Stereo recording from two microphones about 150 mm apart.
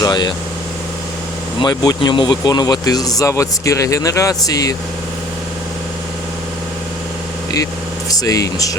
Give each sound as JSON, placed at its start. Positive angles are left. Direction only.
{"t": 0.0, "sound": "speech", "side_deg": 30}
{"t": 1.5, "sound": "speech", "side_deg": 25}
{"t": 8.1, "sound": "speech", "side_deg": 25}